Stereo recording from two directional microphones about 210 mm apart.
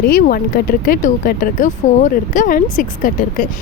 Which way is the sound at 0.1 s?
45° left (ahead or behind).